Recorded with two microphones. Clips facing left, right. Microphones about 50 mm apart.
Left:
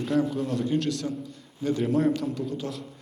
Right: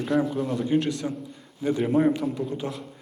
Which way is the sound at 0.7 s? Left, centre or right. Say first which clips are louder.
Right 2 dB; centre.